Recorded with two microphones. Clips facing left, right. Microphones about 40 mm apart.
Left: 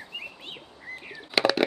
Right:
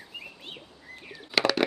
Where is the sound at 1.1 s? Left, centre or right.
Centre.